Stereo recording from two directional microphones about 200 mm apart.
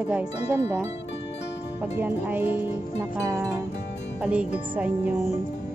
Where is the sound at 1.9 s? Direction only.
10° right (ahead or behind).